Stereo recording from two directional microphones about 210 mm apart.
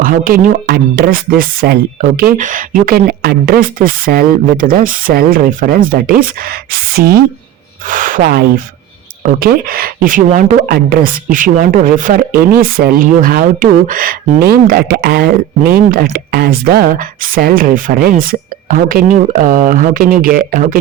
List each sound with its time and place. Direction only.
0.0 s speech: 40° right (ahead or behind)